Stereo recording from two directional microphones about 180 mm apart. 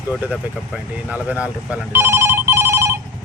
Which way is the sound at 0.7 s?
10° right (ahead or behind).